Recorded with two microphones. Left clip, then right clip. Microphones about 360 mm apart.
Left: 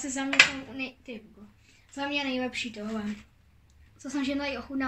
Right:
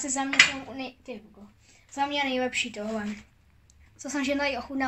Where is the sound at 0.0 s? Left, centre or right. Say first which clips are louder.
Right 3 dB; centre.